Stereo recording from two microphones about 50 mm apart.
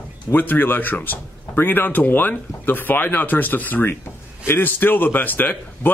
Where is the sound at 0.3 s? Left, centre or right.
Left.